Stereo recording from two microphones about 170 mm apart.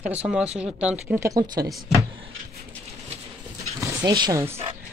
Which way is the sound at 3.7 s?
25° right (ahead or behind).